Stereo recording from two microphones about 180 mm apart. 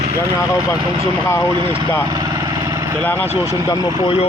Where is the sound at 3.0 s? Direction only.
10° left (ahead or behind).